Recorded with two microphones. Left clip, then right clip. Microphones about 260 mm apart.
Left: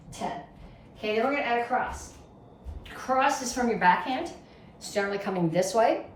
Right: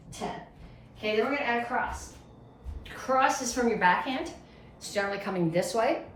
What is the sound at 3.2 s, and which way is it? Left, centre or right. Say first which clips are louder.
A woman's voice: even; centre.